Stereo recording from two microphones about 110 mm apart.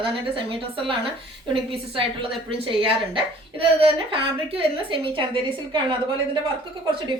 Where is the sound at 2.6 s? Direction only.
50° right (ahead or behind).